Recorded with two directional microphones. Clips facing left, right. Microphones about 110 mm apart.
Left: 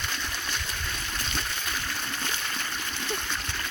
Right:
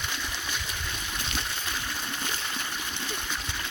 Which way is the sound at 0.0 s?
10° right (ahead or behind).